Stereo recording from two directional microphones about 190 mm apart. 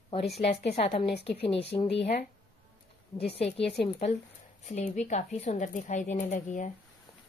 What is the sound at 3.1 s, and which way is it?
Speech, 30° left (ahead or behind).